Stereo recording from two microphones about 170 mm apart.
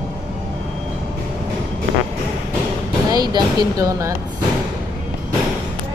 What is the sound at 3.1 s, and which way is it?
Speech, 25° right (ahead or behind).